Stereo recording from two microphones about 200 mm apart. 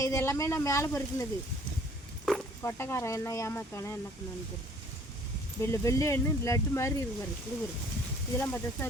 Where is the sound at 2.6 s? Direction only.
10° left (ahead or behind).